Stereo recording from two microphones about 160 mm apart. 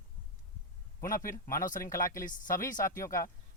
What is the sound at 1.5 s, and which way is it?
Speech, 60° left (ahead or behind).